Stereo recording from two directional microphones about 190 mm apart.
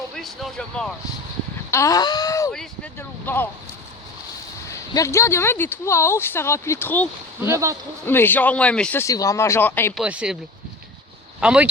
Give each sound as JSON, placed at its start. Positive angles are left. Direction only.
{"t": 0.2, "sound": "speech", "side_deg": 0}
{"t": 1.7, "sound": "speech", "side_deg": 15}
{"t": 2.5, "sound": "a sound", "side_deg": 5}
{"t": 4.7, "sound": "speech", "side_deg": 15}
{"t": 7.4, "sound": "speech", "side_deg": -15}
{"t": 8.0, "sound": "speech", "side_deg": 10}
{"t": 9.9, "sound": "speech", "side_deg": -5}
{"t": 11.3, "sound": "speech", "side_deg": -5}